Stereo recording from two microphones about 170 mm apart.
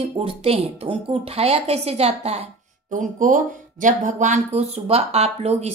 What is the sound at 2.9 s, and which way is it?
Speech, 50° right (ahead or behind).